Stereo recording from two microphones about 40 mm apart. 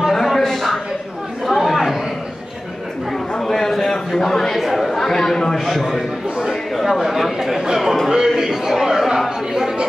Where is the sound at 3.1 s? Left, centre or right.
Centre.